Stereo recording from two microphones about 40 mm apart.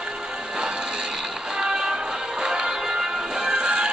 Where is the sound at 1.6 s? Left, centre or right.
Right.